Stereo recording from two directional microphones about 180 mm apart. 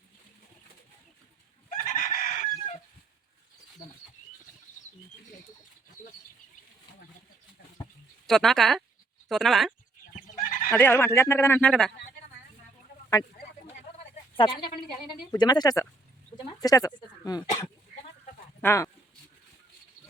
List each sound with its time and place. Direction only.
1.7 s chicken: 45° left (ahead or behind)
8.3 s speech: centre (ahead or behind)
10.4 s neigh: 50° left (ahead or behind)
10.8 s speech: 10° left (ahead or behind)
14.3 s a woman's voice: 30° left (ahead or behind)
16.4 s a sound: 20° left (ahead or behind)
18.6 s speech: 15° left (ahead or behind)